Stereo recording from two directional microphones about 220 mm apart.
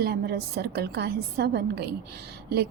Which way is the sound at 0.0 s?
45° right (ahead or behind).